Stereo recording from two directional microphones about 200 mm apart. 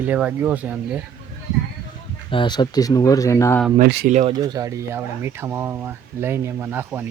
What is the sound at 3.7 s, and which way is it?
Speech, 50° right (ahead or behind).